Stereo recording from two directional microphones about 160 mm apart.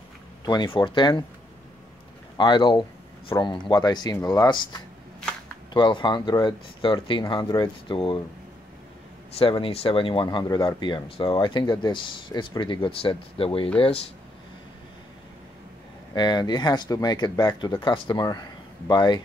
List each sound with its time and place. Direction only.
0.5 s speech: 25° left (ahead or behind)
2.3 s speech: 30° left (ahead or behind)
9.4 s speech: 35° left (ahead or behind)
16.2 s speech: 25° left (ahead or behind)